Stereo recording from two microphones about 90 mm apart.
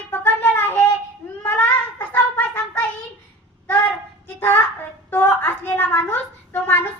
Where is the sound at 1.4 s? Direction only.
20° left (ahead or behind).